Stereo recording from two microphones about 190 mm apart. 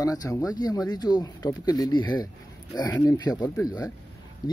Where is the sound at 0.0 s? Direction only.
20° left (ahead or behind).